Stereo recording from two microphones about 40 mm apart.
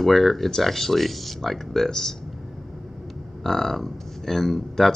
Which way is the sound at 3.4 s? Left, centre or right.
Centre.